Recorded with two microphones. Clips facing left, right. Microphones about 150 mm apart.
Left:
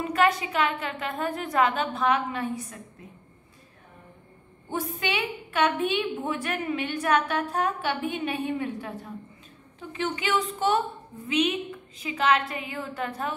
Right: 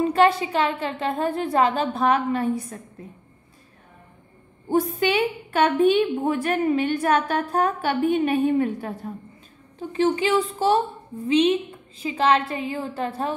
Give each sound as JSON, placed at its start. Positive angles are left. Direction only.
{"t": 0.0, "sound": "a woman's voice", "side_deg": -30}
{"t": 5.0, "sound": "a woman's voice", "side_deg": -35}